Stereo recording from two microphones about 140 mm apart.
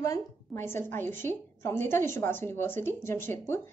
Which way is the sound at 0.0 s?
20° left (ahead or behind).